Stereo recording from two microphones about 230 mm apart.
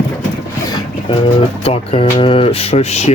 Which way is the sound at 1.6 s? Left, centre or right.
Left.